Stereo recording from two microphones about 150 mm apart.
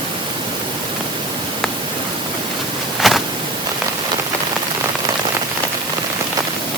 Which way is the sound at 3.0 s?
Centre (ahead or behind).